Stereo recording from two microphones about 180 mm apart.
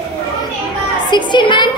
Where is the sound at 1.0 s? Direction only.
25° left (ahead or behind).